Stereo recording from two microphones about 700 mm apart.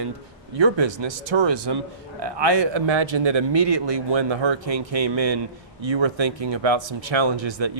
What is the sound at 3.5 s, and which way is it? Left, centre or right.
A man's voice, right.